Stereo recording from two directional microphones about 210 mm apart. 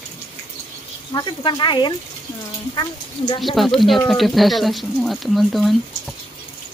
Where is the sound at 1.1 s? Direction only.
20° left (ahead or behind).